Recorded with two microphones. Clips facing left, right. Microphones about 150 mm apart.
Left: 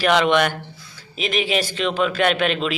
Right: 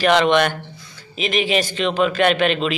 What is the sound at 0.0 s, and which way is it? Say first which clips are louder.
A man's voice: right 2 dB; 5° left (ahead or behind).